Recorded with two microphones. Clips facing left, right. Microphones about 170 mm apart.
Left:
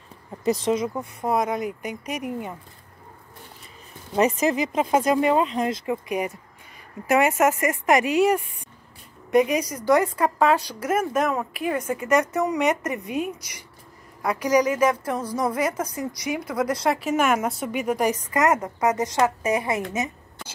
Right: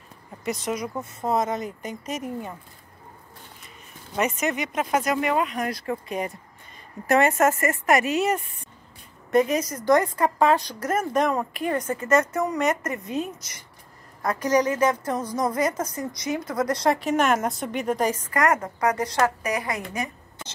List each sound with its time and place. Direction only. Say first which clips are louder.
0.5 s speech: left 6 dB; 30° left (ahead or behind)
1.2 s a woman's voice: left 1 dB; 10° left (ahead or behind)
4.1 s a woman's voice: left 5 dB; 30° left (ahead or behind)